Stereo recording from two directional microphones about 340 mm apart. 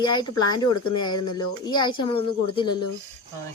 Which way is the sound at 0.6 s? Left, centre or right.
Left.